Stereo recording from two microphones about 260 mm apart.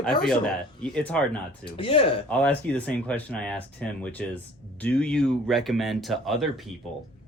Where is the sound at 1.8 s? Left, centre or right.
Left.